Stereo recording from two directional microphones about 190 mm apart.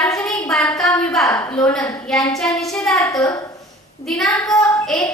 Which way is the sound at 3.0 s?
15° left (ahead or behind).